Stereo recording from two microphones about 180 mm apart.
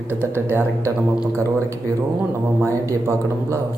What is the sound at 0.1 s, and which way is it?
Speech, 10° right (ahead or behind).